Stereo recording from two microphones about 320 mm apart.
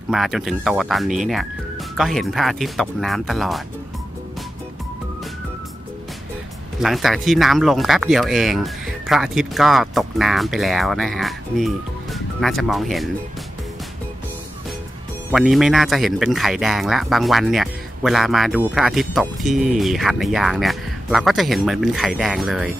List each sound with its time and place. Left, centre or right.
0.1 s speech: centre
6.8 s speech: centre
15.3 s speech: centre